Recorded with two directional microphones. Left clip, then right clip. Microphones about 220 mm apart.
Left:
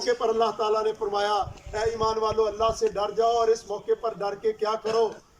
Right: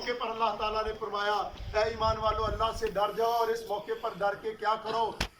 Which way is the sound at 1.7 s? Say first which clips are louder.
Left 3 dB; 25° left (ahead or behind).